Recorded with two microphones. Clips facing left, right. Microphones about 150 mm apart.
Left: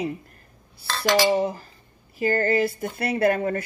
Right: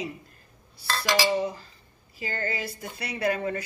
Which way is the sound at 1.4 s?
55° left (ahead or behind).